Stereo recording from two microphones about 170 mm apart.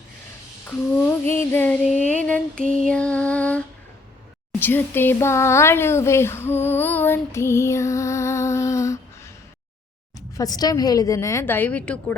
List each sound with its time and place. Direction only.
1.2 s child singing: 10° left (ahead or behind)
2.0 s a sound: 45° right (ahead or behind)
2.2 s child singing: 5° left (ahead or behind)
2.8 s music: 5° left (ahead or behind)
4.6 s speech: 10° left (ahead or behind)
10.2 s speech: 20° left (ahead or behind)